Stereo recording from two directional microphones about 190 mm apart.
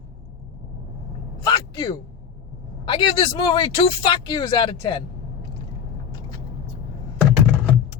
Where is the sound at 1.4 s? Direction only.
20° left (ahead or behind).